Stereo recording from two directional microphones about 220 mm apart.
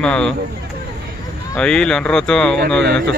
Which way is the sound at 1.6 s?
5° left (ahead or behind).